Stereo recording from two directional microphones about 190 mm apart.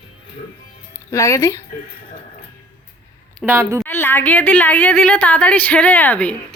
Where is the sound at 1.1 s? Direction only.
15° left (ahead or behind).